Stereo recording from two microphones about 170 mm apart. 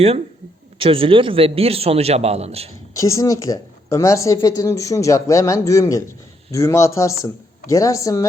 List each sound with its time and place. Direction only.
0.8 s a man's voice: 30° right (ahead or behind)
2.9 s a woman's voice: 20° left (ahead or behind)